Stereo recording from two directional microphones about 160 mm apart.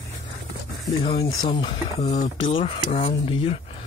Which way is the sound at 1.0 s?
25° left (ahead or behind).